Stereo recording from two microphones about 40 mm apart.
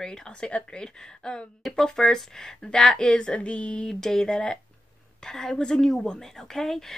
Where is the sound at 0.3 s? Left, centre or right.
Left.